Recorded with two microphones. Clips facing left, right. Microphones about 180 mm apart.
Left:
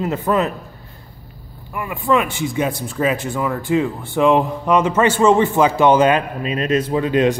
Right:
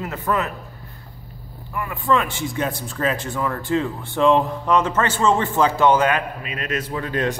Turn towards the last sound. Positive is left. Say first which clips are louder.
# left 8 dB
turn(degrees=20)  # may be behind; listen again after turning